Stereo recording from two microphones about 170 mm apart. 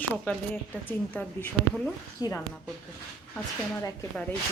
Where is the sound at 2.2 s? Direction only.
20° left (ahead or behind).